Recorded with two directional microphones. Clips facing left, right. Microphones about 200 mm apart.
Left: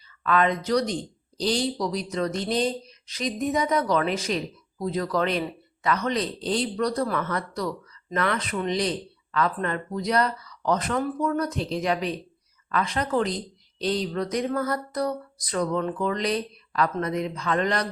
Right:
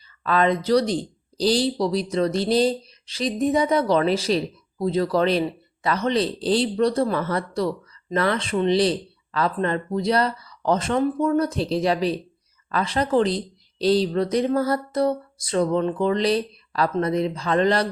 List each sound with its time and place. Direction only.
0.2 s speech: 30° right (ahead or behind)